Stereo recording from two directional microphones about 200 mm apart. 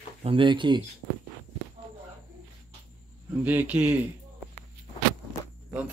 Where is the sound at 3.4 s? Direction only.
10° right (ahead or behind).